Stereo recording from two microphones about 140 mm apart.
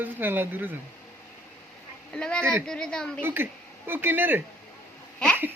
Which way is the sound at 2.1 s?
5° left (ahead or behind).